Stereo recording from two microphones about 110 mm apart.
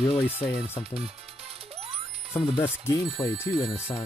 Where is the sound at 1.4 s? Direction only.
65° right (ahead or behind).